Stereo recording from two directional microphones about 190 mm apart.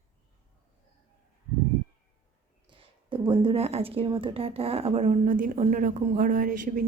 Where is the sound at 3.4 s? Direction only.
30° right (ahead or behind).